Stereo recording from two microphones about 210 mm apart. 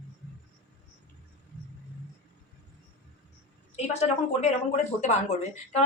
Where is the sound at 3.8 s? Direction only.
30° left (ahead or behind).